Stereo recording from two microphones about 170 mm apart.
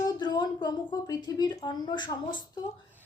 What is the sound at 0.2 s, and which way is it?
A woman's voice, 25° left (ahead or behind).